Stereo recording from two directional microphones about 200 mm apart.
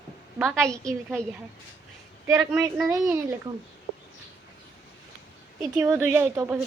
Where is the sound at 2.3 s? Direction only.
10° right (ahead or behind).